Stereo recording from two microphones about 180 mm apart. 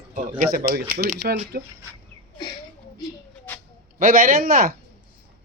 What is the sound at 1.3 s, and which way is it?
Speech, 45° right (ahead or behind).